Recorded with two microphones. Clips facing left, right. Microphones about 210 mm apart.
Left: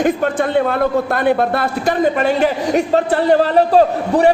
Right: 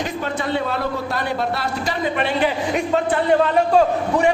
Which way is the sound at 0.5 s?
55° left (ahead or behind).